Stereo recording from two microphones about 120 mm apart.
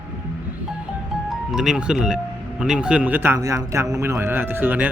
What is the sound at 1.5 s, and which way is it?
Speech, 5° right (ahead or behind).